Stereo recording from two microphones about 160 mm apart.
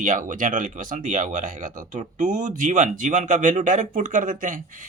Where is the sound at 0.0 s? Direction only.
55° right (ahead or behind).